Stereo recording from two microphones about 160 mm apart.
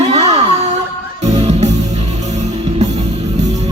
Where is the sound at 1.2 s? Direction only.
40° right (ahead or behind).